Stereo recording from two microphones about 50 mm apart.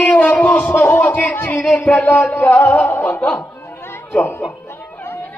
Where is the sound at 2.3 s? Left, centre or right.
Left.